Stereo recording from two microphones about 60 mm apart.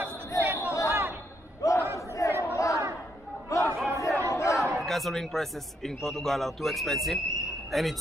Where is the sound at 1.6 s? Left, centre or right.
Left.